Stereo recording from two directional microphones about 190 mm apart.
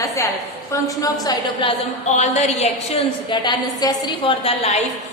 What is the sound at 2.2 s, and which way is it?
A woman's voice, 35° left (ahead or behind).